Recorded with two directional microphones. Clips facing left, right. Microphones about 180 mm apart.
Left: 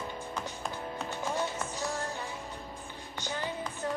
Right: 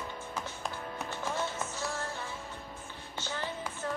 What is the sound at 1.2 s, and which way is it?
Music, 15° left (ahead or behind).